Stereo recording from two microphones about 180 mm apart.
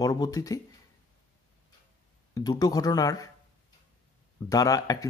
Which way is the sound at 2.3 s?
20° left (ahead or behind).